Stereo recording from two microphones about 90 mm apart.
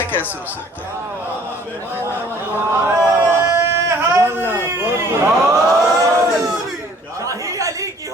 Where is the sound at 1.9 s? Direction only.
25° right (ahead or behind).